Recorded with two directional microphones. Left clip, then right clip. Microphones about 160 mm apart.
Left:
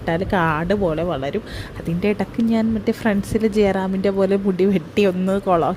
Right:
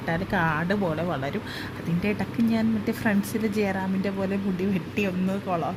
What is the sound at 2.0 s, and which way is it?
Speech, 35° left (ahead or behind).